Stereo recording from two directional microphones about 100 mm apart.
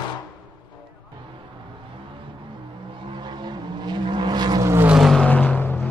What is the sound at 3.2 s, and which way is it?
Vehicle, 45° right (ahead or behind).